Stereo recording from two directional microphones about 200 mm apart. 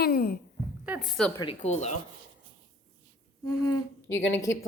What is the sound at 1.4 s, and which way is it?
Speech, 30° left (ahead or behind).